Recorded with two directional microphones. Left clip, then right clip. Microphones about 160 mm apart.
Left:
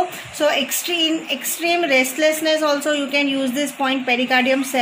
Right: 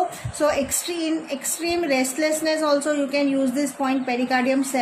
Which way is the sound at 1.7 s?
55° left (ahead or behind).